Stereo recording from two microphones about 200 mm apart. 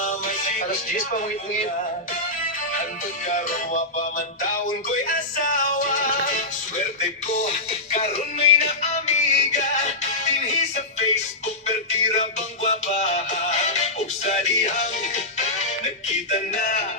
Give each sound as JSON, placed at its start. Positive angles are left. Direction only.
{"t": 0.0, "sound": "music", "side_deg": 40}
{"t": 3.2, "sound": "music", "side_deg": 40}
{"t": 5.0, "sound": "music", "side_deg": 40}
{"t": 7.7, "sound": "music", "side_deg": 30}